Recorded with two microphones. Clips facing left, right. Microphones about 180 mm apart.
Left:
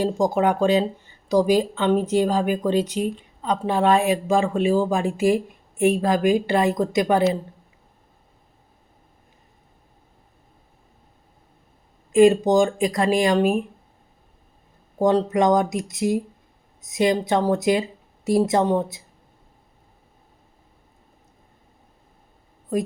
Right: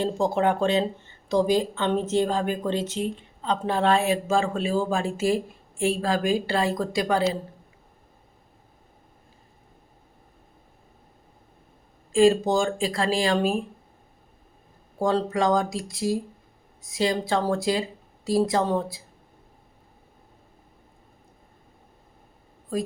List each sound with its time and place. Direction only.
0.0 s a woman's voice: 10° left (ahead or behind)
12.1 s a woman's voice: 20° left (ahead or behind)
14.9 s a woman's voice: 20° left (ahead or behind)